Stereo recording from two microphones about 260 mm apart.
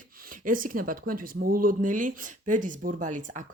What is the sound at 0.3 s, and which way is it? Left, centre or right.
Speech, right.